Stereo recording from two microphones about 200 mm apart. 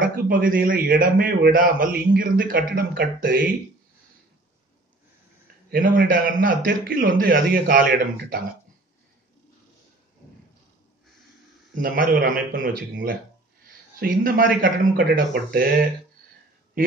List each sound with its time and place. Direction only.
0.0 s a man's voice: 45° right (ahead or behind)
5.7 s a man's voice: 45° right (ahead or behind)
11.7 s a man's voice: 45° right (ahead or behind)
13.9 s a man's voice: 45° right (ahead or behind)